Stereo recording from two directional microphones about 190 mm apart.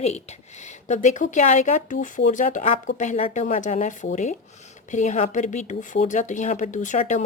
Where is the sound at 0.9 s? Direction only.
40° left (ahead or behind).